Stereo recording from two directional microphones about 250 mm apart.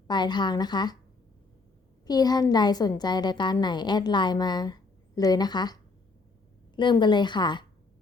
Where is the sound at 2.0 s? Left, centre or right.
Centre.